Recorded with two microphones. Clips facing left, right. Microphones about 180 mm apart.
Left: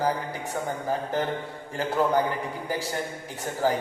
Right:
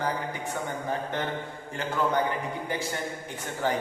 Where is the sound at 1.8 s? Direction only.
35° left (ahead or behind).